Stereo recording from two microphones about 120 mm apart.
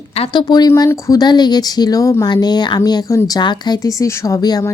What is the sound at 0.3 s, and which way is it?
A woman's voice, 35° left (ahead or behind).